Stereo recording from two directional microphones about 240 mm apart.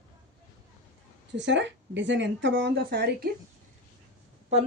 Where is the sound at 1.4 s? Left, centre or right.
Right.